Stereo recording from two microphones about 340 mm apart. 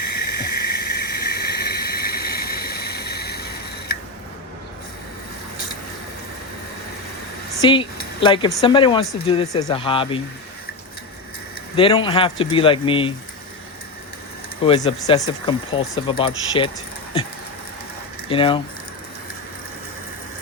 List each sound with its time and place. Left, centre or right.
0.2 s a sound: left
7.6 s speech: centre
11.8 s speech: centre
14.6 s speech: centre
18.3 s speech: centre